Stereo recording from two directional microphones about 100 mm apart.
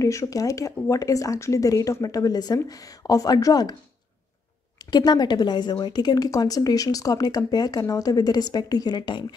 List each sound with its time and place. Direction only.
0.0 s a woman's voice: 30° left (ahead or behind)
4.9 s a woman's voice: 45° left (ahead or behind)